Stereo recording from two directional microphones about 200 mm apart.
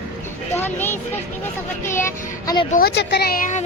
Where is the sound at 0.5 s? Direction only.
10° left (ahead or behind).